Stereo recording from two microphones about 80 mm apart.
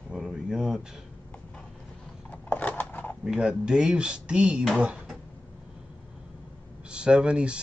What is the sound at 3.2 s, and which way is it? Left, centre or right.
Speech, centre.